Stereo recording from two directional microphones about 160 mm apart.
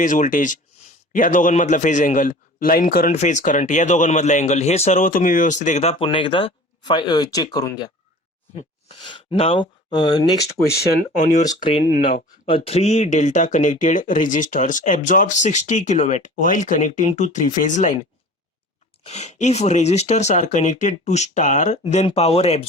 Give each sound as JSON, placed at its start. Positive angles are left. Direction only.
{"t": 0.0, "sound": "a man's voice", "side_deg": 55}
{"t": 9.0, "sound": "speech", "side_deg": 30}
{"t": 11.2, "sound": "speech", "side_deg": 50}
{"t": 11.6, "sound": "speech", "side_deg": 35}
{"t": 11.9, "sound": "speech", "side_deg": 50}
{"t": 12.5, "sound": "speech", "side_deg": 35}
{"t": 19.0, "sound": "speech", "side_deg": 45}